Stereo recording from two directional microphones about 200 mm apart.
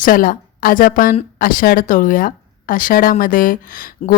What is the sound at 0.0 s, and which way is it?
A woman's voice, 45° left (ahead or behind).